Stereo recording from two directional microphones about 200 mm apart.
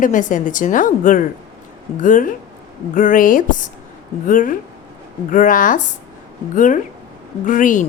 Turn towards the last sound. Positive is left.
turn(degrees=40)  # may be behind; listen again after turning